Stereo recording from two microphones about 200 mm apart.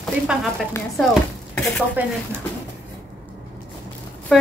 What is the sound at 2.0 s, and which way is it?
Speech, 10° right (ahead or behind).